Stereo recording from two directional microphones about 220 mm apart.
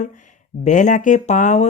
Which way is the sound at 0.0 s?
35° left (ahead or behind).